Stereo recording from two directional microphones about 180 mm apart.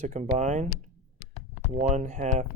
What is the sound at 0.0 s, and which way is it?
Speech, 40° right (ahead or behind).